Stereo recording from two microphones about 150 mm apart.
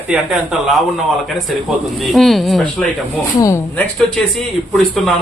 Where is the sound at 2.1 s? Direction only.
Centre (ahead or behind).